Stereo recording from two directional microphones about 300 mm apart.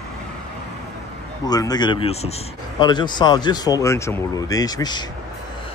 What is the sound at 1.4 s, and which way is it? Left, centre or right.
Speech, centre.